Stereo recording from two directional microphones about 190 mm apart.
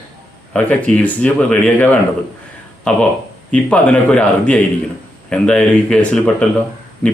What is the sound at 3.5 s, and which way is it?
Speech, 5° left (ahead or behind).